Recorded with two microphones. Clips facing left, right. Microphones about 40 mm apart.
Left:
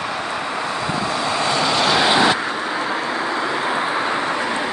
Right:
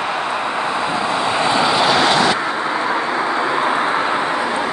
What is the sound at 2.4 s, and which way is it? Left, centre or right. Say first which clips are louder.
Vehicle: right 3 dB; centre.